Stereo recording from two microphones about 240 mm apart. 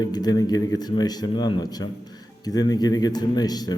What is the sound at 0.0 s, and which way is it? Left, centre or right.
Speech, centre.